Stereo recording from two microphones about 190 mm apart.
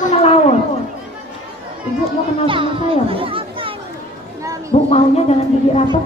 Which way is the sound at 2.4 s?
25° right (ahead or behind).